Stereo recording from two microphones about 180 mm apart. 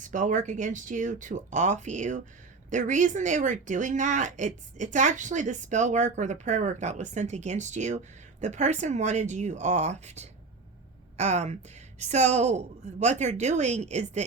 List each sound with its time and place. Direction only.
0.0 s speech: 45° right (ahead or behind)